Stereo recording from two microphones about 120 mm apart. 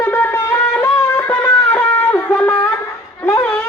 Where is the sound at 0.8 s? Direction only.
15° left (ahead or behind).